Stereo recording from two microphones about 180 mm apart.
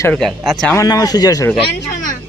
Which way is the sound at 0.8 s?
20° left (ahead or behind).